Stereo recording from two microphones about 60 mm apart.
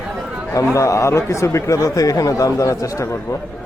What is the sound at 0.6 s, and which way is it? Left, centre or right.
Speech, left.